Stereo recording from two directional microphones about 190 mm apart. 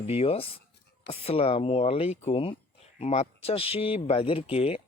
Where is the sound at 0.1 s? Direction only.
30° left (ahead or behind).